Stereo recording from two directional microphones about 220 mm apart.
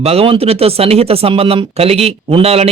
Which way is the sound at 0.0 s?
25° right (ahead or behind).